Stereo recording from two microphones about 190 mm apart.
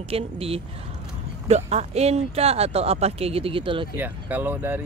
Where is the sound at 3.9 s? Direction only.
10° right (ahead or behind).